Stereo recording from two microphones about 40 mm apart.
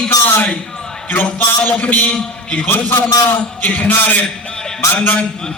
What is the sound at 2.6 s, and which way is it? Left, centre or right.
Speech, left.